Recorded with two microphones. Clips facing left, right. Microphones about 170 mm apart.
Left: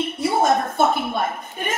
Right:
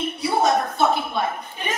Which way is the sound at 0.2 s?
50° left (ahead or behind).